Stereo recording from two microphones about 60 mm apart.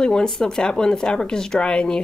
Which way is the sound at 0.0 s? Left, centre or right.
Centre.